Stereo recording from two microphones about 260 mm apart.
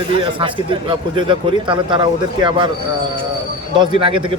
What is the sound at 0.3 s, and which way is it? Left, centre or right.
Speech, centre.